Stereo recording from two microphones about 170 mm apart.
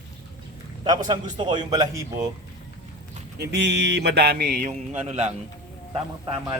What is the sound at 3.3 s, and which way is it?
A man's voice, 75° right (ahead or behind).